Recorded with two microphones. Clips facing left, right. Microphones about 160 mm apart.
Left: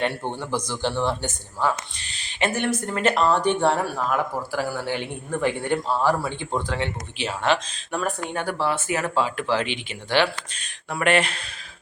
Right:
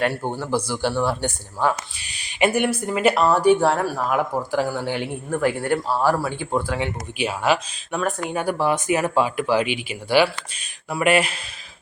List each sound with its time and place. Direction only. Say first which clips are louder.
0.1 s speech: right 4 dB; 5° right (ahead or behind)
4.1 s speech: right 3 dB; 15° right (ahead or behind)